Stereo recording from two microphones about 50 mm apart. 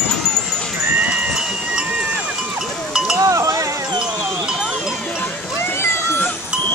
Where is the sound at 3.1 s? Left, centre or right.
Right.